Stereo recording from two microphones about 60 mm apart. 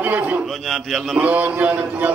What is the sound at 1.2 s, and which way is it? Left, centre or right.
Speech, right.